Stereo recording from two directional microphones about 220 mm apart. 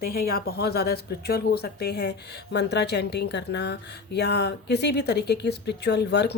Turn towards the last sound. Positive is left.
turn(degrees=50)  # may be behind; listen again after turning